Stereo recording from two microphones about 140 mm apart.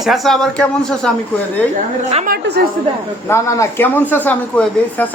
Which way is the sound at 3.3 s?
20° left (ahead or behind).